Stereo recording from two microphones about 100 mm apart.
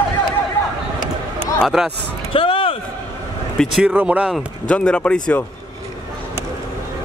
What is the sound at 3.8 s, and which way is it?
Speech, 10° right (ahead or behind).